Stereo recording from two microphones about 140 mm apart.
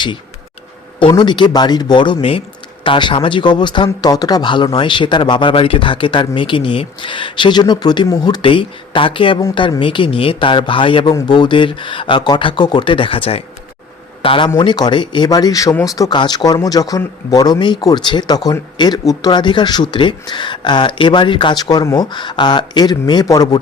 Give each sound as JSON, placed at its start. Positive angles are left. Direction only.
{"t": 0.9, "sound": "speech", "side_deg": 35}